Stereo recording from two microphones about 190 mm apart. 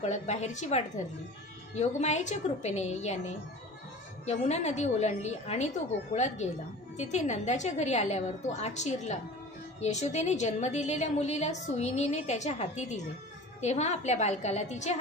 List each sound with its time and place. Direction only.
0.0 s a woman's voice: 35° left (ahead or behind)